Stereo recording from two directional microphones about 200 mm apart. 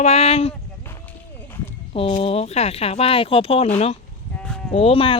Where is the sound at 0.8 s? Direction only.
10° left (ahead or behind).